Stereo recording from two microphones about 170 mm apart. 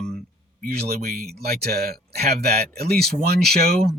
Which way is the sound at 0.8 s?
65° right (ahead or behind).